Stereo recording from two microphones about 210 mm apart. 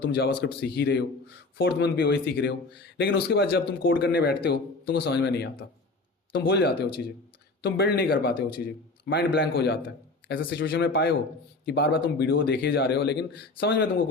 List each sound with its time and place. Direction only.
0.0 s speech: 50° left (ahead or behind)